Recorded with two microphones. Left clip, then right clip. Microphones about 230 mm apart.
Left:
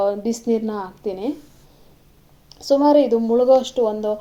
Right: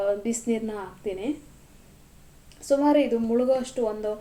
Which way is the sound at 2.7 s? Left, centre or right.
Centre.